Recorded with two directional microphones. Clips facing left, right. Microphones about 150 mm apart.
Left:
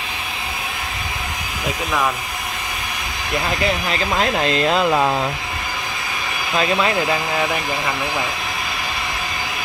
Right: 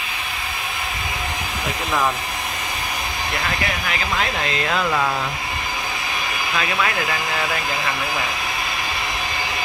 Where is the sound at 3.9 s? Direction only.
35° left (ahead or behind).